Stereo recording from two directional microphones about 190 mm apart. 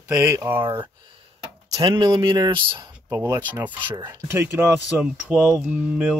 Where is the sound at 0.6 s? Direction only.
25° right (ahead or behind).